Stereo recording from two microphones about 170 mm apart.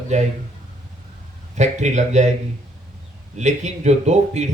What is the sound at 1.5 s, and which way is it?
Speech, 40° right (ahead or behind).